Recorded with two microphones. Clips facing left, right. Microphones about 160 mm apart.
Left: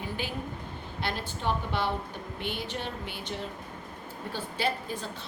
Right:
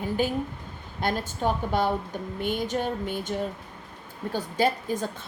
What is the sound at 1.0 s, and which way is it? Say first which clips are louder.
A woman's voice: right 5 dB; 45° right (ahead or behind).